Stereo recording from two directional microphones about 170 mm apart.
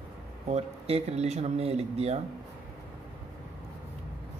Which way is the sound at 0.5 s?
40° right (ahead or behind).